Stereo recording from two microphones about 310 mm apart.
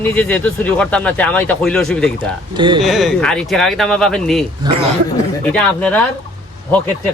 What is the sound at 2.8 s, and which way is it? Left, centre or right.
Speech, centre.